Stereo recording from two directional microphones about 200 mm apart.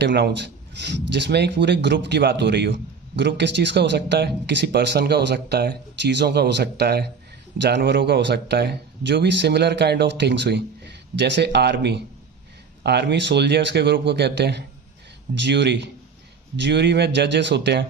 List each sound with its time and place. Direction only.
0.0 s speech: 60° right (ahead or behind)